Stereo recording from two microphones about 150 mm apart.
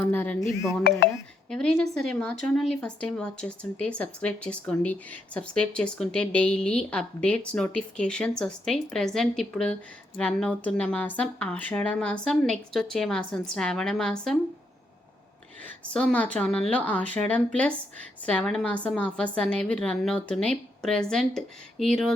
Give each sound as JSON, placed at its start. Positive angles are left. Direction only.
{"t": 0.0, "sound": "speech", "side_deg": 10}
{"t": 0.9, "sound": "speech", "side_deg": 90}
{"t": 1.5, "sound": "a woman's voice", "side_deg": 5}
{"t": 15.6, "sound": "a woman's voice", "side_deg": 10}